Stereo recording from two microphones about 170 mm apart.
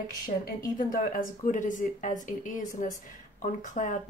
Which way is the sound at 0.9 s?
50° left (ahead or behind).